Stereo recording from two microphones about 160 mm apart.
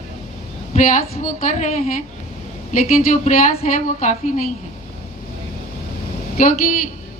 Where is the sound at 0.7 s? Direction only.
55° left (ahead or behind).